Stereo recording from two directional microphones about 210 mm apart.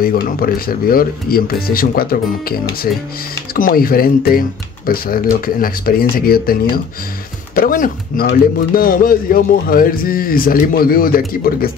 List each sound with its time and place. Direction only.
0.0 s speech: 45° left (ahead or behind)